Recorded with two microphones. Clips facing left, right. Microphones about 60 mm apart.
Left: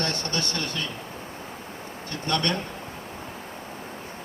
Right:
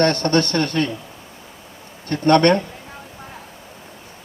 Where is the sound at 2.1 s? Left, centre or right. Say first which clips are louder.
Right 13 dB; right.